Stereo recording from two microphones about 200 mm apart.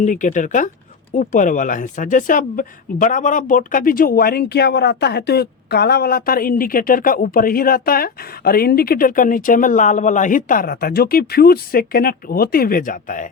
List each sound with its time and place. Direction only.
0.0 s speech: 40° left (ahead or behind)